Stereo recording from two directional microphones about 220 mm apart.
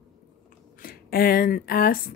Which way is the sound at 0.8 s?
40° left (ahead or behind).